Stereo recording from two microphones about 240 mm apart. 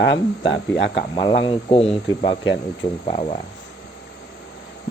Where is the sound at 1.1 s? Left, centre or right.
Left.